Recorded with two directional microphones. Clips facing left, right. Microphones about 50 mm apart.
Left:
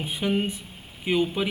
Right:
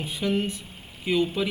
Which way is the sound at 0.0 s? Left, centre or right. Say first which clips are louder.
Left 1 dB; left.